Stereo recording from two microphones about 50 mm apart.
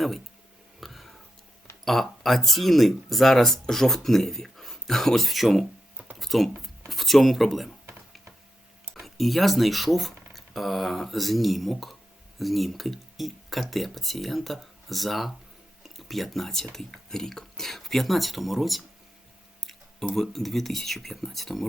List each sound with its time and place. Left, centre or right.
0.8 s a sound: centre
1.8 s speech: centre
6.1 s a sound: centre
6.6 s speech: centre
9.0 s speech: centre
20.1 s speech: centre